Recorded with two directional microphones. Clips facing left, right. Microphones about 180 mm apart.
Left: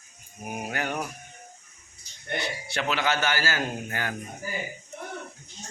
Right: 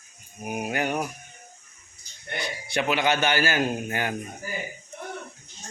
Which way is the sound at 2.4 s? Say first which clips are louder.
Right 5 dB; 15° right (ahead or behind).